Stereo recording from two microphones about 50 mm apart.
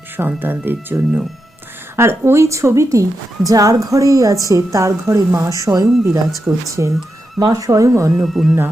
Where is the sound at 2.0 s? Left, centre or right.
Right.